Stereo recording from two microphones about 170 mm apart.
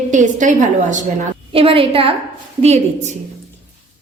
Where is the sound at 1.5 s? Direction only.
35° right (ahead or behind).